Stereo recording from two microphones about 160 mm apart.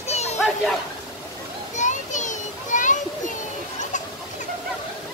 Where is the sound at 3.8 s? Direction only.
50° left (ahead or behind).